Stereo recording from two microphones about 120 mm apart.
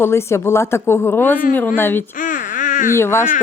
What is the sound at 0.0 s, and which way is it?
Speech, 20° left (ahead or behind).